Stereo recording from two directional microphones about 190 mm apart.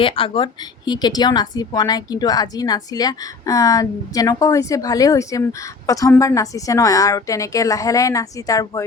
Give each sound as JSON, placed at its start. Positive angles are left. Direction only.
{"t": 0.0, "sound": "speech", "side_deg": 25}